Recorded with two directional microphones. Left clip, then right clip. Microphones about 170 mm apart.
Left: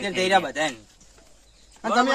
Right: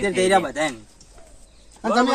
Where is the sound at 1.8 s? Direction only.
Centre (ahead or behind).